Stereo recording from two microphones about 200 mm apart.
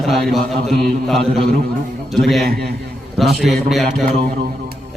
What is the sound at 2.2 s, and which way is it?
A man's voice, centre (ahead or behind).